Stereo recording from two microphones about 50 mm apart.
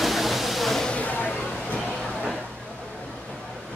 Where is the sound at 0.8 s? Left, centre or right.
Left.